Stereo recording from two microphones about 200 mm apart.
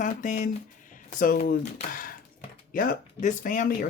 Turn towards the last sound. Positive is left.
turn(degrees=40)  # may be behind; listen again after turning